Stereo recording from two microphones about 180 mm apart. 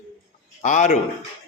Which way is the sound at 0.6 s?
45° left (ahead or behind).